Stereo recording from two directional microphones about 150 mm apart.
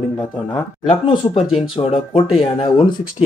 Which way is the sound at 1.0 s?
35° left (ahead or behind).